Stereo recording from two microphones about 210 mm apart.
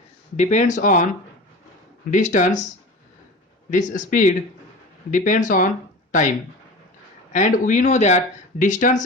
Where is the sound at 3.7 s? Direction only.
35° left (ahead or behind).